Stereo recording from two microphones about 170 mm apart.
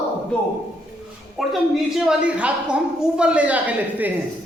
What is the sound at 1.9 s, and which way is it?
A woman's voice, 5° right (ahead or behind).